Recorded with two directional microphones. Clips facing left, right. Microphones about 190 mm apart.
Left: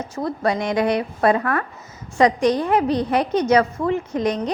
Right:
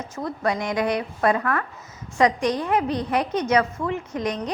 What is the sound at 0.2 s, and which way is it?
A woman's voice, 35° left (ahead or behind).